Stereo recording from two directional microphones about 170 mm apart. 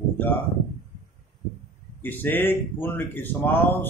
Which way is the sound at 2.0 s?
10° left (ahead or behind).